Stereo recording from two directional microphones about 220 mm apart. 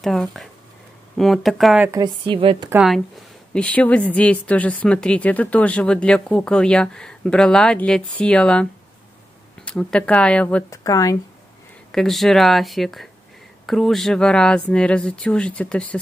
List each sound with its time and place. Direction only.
0.0 s a woman's voice: centre (ahead or behind)
1.9 s a woman's voice: 20° right (ahead or behind)
2.7 s a woman's voice: centre (ahead or behind)
9.7 s a woman's voice: 5° left (ahead or behind)
11.9 s a woman's voice: centre (ahead or behind)